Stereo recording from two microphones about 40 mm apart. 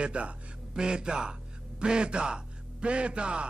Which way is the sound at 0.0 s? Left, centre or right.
Right.